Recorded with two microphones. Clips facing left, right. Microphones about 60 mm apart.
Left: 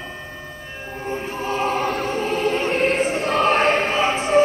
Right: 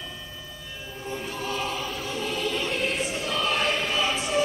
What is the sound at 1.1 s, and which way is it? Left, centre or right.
Choir, left.